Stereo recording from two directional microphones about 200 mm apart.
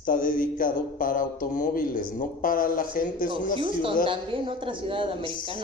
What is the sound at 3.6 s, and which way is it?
A woman's voice, 25° right (ahead or behind).